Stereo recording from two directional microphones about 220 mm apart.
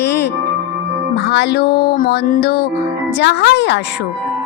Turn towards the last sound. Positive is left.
turn(degrees=55)  # may be behind; listen again after turning